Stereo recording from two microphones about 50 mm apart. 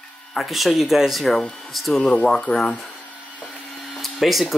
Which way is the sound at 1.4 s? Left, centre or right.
Centre.